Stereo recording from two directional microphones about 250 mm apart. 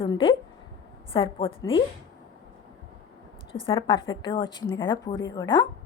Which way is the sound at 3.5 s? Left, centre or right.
Left.